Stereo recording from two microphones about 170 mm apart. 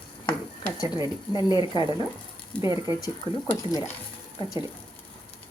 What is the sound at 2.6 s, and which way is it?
Speech, 20° right (ahead or behind).